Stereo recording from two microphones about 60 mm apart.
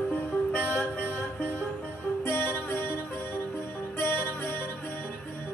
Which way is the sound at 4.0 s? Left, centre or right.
Left.